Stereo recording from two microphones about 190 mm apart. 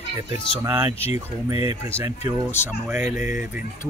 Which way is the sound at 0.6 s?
15° right (ahead or behind).